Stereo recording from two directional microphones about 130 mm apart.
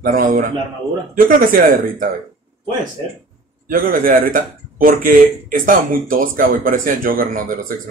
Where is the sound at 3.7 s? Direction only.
90° right.